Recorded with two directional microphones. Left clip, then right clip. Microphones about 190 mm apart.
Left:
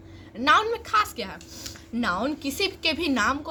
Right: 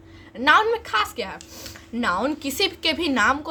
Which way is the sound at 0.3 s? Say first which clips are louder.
Right 3 dB; centre (ahead or behind).